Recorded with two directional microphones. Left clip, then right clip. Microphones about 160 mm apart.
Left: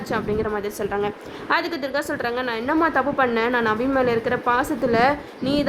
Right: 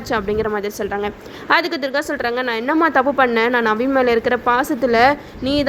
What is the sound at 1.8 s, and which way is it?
A woman's voice, 20° right (ahead or behind).